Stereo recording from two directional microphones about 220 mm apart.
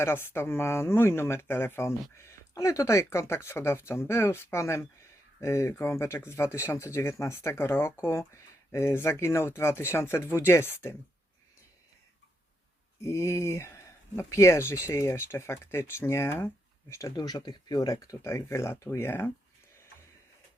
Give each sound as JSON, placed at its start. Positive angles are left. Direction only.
{"t": 0.0, "sound": "speech", "side_deg": 10}
{"t": 13.0, "sound": "speech", "side_deg": 10}